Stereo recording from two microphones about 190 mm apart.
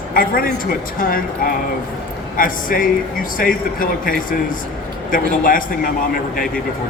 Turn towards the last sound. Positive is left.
turn(degrees=45)  # may be behind; listen again after turning